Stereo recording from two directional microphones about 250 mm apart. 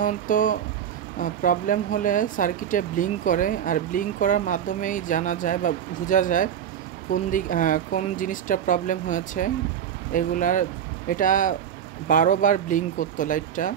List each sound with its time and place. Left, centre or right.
0.0 s speech: left